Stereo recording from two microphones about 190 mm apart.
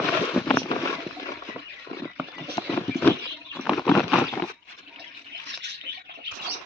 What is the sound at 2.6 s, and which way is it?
Horse, 20° left (ahead or behind).